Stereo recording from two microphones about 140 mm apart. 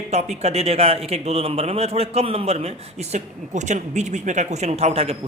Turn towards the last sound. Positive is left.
turn(degrees=-45)  # may be behind; listen again after turning